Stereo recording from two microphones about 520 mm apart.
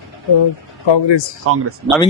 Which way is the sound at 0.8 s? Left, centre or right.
Left.